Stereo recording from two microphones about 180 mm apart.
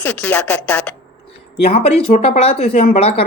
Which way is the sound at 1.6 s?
35° left (ahead or behind).